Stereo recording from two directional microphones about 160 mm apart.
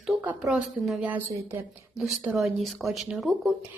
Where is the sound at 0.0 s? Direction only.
5° right (ahead or behind).